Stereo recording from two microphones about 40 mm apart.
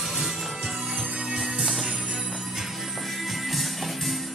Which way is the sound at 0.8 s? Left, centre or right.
Right.